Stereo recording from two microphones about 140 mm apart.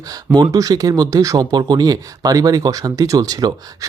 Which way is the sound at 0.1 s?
25° right (ahead or behind).